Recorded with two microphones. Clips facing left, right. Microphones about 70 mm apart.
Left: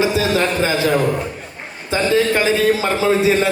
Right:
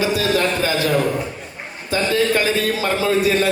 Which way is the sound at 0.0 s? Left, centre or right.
Left.